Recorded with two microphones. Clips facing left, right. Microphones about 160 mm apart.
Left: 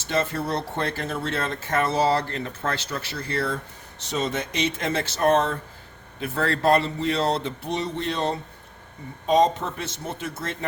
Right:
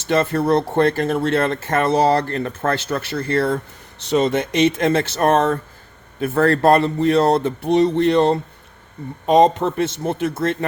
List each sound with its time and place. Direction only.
0.1 s speech: 55° right (ahead or behind)